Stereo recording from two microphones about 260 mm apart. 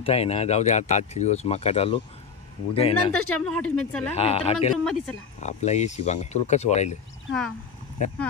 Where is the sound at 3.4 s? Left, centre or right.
Centre.